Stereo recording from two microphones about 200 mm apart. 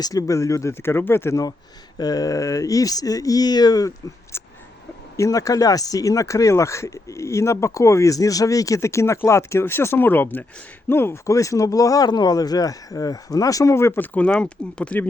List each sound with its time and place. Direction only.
0.0 s speech: 15° left (ahead or behind)